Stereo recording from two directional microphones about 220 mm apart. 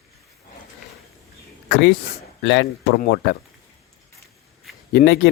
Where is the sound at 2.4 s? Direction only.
55° left (ahead or behind).